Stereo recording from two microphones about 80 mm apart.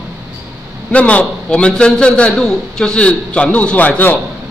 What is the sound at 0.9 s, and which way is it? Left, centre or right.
A man's voice, centre.